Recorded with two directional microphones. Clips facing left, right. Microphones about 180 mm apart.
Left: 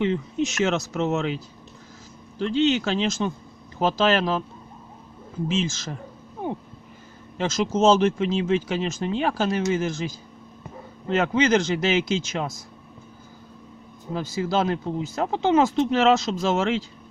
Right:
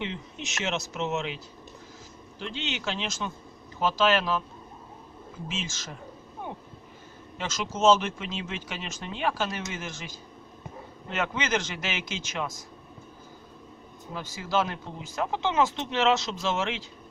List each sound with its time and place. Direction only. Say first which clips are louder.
0.0 s speech: left 12 dB; 45° left (ahead or behind)
2.4 s speech: left 13 dB; 40° left (ahead or behind)
7.3 s speech: left 9 dB; 35° left (ahead or behind)
11.1 s speech: left 9 dB; 35° left (ahead or behind)
14.1 s speech: left 5 dB; 35° left (ahead or behind)